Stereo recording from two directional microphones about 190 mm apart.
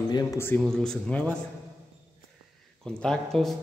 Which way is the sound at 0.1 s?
15° left (ahead or behind).